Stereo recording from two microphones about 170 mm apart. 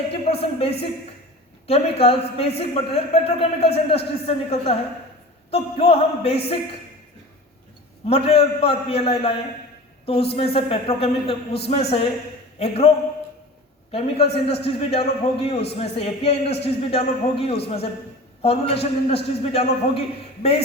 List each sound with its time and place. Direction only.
0.1 s a sound: 35° left (ahead or behind)
1.6 s a man's voice: 35° left (ahead or behind)
8.0 s a man's voice: 35° left (ahead or behind)
10.3 s a man's voice: 35° left (ahead or behind)
13.9 s a man's voice: 35° left (ahead or behind)